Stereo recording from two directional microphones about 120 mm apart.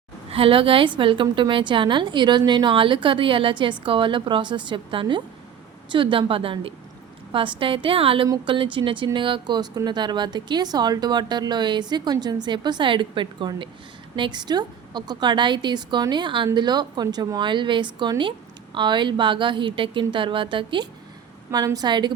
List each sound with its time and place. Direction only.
0.3 s a woman's voice: 50° right (ahead or behind)
21.5 s speech: 30° right (ahead or behind)